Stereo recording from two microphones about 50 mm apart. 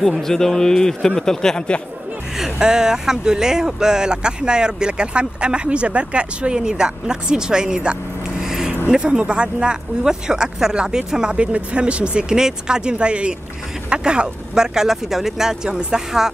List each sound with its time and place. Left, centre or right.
0.0 s a man's voice: centre
2.3 s speech: centre